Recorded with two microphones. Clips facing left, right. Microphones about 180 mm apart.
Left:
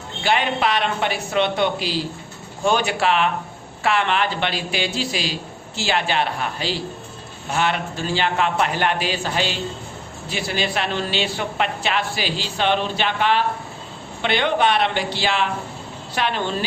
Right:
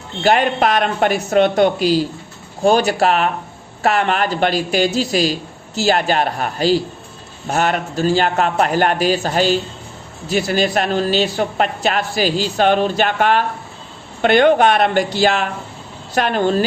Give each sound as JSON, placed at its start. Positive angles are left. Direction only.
{"t": 0.2, "sound": "a woman's voice", "side_deg": -45}